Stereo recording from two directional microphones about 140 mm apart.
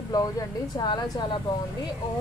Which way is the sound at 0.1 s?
25° left (ahead or behind).